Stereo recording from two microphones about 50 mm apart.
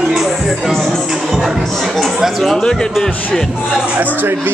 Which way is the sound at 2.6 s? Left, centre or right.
Centre.